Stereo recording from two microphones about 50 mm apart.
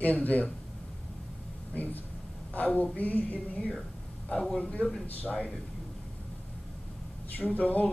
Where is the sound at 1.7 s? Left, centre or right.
Left.